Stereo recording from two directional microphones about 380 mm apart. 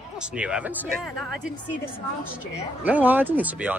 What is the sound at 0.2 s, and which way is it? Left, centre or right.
Speech, centre.